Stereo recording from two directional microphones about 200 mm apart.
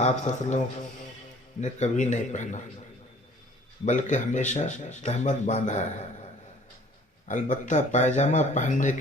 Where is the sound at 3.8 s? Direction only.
40° left (ahead or behind).